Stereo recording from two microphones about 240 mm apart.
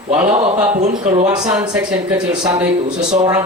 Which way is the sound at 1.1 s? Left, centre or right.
Centre.